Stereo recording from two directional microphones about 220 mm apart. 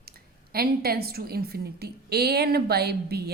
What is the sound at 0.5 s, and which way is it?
A woman's voice, 45° right (ahead or behind).